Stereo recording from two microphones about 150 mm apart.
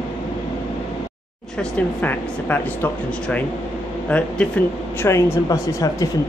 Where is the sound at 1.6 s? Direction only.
10° left (ahead or behind).